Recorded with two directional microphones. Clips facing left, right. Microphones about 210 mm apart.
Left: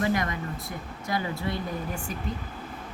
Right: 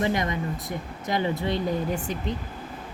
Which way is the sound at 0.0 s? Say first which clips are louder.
Right 2 dB; 20° right (ahead or behind).